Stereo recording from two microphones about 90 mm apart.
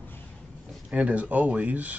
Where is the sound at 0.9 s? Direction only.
15° right (ahead or behind).